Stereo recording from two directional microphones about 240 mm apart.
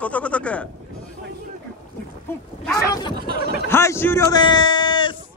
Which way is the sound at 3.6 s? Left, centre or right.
Centre.